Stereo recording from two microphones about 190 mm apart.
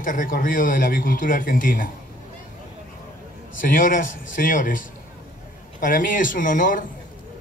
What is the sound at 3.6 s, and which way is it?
A man's voice, 45° left (ahead or behind).